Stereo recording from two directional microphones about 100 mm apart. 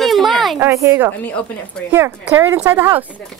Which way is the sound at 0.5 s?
25° right (ahead or behind).